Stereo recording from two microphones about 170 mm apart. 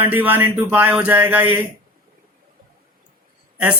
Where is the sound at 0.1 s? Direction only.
10° right (ahead or behind).